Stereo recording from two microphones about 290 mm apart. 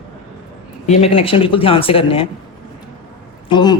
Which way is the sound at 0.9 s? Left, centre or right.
Left.